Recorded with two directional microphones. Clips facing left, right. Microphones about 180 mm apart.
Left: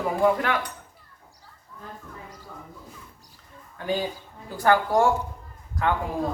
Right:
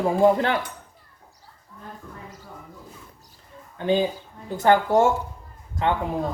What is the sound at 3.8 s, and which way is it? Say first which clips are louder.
A man's voice: right 6 dB; 25° right (ahead or behind).